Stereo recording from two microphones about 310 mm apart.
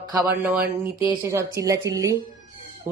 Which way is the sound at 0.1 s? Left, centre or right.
Centre.